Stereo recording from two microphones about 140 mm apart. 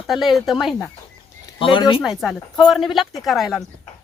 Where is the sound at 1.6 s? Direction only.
35° left (ahead or behind).